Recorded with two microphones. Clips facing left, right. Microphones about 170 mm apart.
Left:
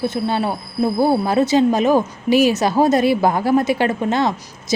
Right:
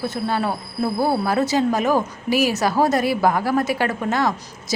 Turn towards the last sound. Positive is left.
turn(degrees=20)  # may be behind; listen again after turning